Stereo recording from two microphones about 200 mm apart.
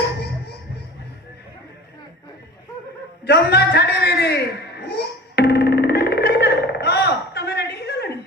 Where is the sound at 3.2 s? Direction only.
55° left (ahead or behind).